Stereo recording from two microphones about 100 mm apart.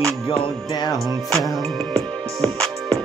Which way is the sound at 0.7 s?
45° left (ahead or behind).